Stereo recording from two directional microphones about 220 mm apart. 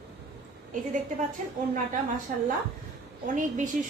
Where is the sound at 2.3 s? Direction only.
35° right (ahead or behind).